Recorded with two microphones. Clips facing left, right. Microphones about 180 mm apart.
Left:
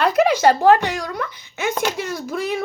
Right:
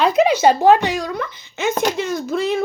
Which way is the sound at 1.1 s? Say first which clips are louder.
Right 1 dB; 10° left (ahead or behind).